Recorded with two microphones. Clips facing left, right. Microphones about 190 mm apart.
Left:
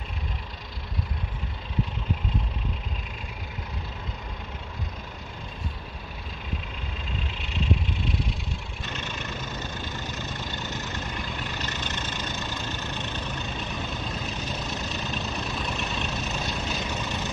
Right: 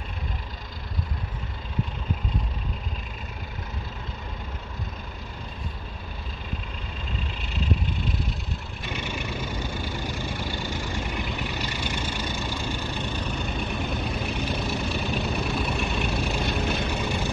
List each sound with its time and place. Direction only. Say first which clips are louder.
7.2 s vehicle: left 1 dB; centre (ahead or behind)
8.8 s vehicle: right 4 dB; 10° right (ahead or behind)
16.4 s vehicle: right 5 dB; 55° right (ahead or behind)
16.9 s vehicle: right 4 dB; 10° right (ahead or behind)